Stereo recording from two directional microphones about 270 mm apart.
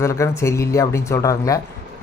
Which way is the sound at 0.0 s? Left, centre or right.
Centre.